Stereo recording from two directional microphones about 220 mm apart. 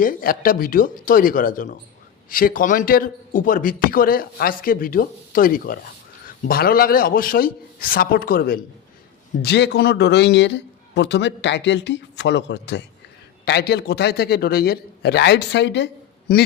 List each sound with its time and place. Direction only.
0.0 s speech: 40° left (ahead or behind)